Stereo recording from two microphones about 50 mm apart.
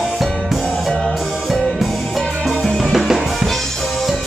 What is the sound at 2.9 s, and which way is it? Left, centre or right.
Music, centre.